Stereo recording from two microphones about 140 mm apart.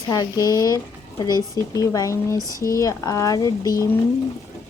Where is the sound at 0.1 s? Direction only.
25° left (ahead or behind).